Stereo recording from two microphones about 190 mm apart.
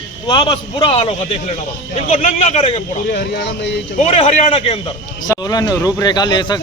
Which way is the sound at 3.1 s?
60° left (ahead or behind).